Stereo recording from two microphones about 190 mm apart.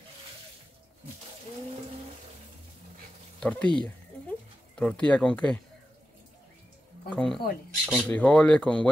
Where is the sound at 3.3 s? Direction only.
5° left (ahead or behind).